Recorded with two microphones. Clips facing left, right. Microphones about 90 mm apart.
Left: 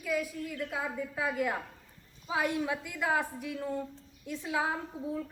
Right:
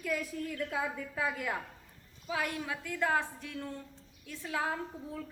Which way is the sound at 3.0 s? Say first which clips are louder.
Even; 10° left (ahead or behind).